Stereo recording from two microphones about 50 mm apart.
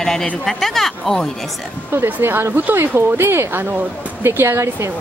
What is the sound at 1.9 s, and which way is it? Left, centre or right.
Speech, right.